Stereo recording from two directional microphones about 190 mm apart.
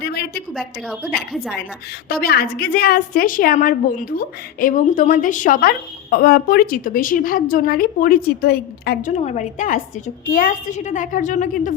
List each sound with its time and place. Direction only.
0.0 s a sound: 55° left (ahead or behind)
0.5 s a woman's voice: centre (ahead or behind)
2.0 s a woman's voice: 55° left (ahead or behind)